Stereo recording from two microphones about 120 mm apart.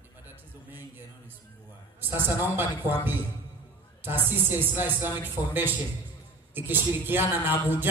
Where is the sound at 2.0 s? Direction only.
15° right (ahead or behind).